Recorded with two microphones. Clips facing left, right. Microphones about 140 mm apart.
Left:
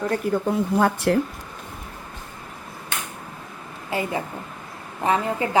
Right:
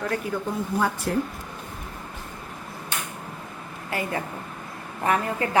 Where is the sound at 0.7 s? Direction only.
65° left (ahead or behind).